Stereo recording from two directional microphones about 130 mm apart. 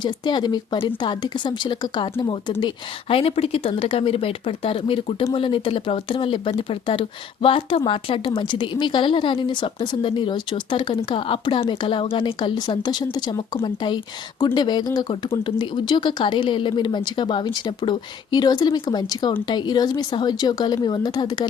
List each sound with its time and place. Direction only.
0.0 s a woman's voice: 35° left (ahead or behind)